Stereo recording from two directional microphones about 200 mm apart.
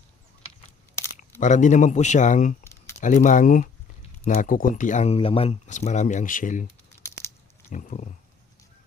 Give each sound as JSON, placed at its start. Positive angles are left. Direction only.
{"t": 1.4, "sound": "speech", "side_deg": 40}
{"t": 7.7, "sound": "speech", "side_deg": 40}